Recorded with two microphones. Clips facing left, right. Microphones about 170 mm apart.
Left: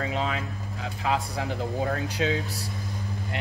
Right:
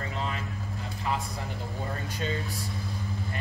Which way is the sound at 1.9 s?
85° left.